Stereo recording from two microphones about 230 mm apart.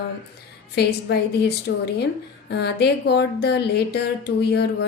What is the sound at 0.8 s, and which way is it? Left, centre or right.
Speech, left.